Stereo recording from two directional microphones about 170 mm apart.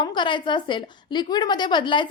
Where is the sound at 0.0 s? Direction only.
25° left (ahead or behind).